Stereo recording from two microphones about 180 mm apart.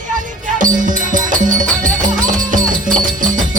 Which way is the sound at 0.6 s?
45° right (ahead or behind).